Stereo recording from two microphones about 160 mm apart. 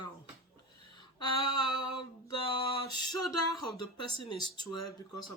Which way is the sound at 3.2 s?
Centre (ahead or behind).